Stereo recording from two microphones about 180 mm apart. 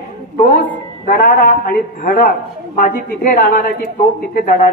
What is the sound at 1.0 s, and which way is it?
A woman's voice, 50° left (ahead or behind).